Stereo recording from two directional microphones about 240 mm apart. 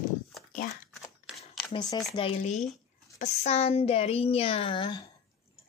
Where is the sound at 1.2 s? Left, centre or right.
Centre.